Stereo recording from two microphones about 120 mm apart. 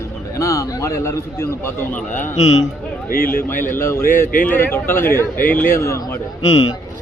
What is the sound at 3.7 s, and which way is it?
A man's voice, 20° left (ahead or behind).